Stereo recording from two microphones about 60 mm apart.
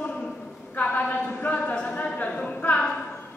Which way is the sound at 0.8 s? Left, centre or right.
Left.